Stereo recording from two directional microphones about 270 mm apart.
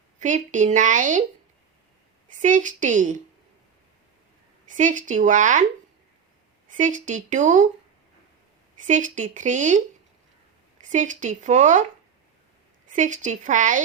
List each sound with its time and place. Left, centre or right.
0.2 s speech: right
2.4 s speech: right
4.7 s speech: right
6.7 s speech: right
8.9 s speech: right
12.9 s speech: right